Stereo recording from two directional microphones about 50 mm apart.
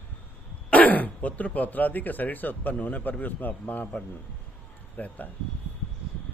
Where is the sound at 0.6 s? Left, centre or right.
Left.